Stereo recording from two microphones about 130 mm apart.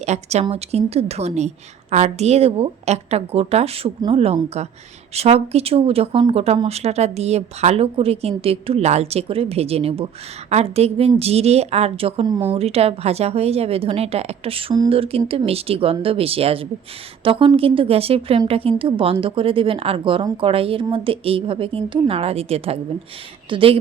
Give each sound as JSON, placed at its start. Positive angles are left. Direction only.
{"t": 0.0, "sound": "a woman's voice", "side_deg": -60}